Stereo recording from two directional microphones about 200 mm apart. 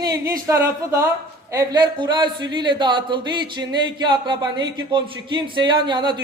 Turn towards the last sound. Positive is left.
turn(degrees=-20)  # may be behind; listen again after turning